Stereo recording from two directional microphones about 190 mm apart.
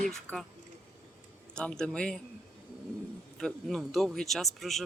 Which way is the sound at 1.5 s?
5° left (ahead or behind).